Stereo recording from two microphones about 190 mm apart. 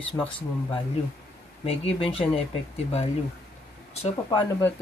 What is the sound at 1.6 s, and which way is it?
Speech, 30° left (ahead or behind).